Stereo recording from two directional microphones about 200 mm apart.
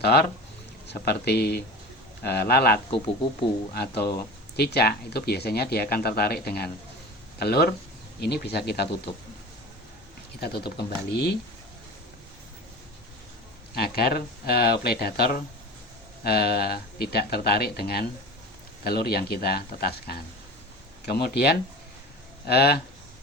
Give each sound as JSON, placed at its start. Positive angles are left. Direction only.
{"t": 0.0, "sound": "speech", "side_deg": 55}
{"t": 10.4, "sound": "speech", "side_deg": 50}
{"t": 13.7, "sound": "speech", "side_deg": 50}